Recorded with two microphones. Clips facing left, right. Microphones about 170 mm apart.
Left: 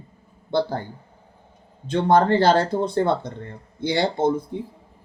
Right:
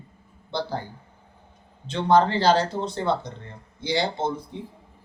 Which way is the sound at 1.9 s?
50° left (ahead or behind).